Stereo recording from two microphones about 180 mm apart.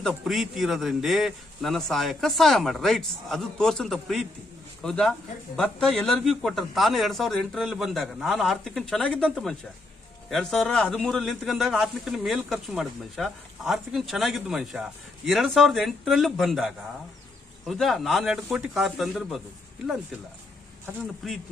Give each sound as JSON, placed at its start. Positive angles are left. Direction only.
{"t": 0.1, "sound": "a man's voice", "side_deg": 0}
{"t": 21.2, "sound": "a man's voice", "side_deg": 0}